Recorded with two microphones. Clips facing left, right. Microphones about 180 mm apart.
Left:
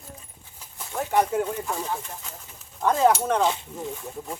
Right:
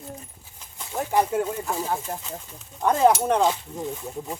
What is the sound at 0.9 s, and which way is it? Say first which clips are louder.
Speech: right 1 dB; 20° right (ahead or behind).